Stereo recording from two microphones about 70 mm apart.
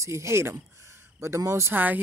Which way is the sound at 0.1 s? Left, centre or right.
Right.